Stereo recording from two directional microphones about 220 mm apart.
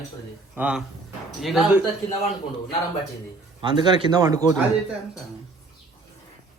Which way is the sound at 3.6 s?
20° right (ahead or behind).